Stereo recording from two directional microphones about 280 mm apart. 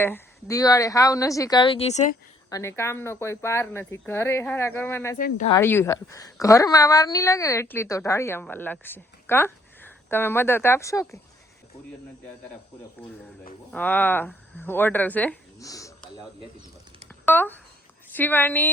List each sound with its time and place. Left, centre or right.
0.0 s a woman's voice: centre
2.5 s a woman's voice: centre
5.1 s speech: left
5.5 s a woman's voice: centre
13.7 s a woman's voice: centre
17.2 s a woman's voice: centre